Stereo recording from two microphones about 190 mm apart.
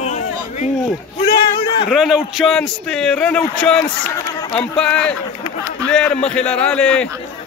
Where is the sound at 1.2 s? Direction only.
25° left (ahead or behind).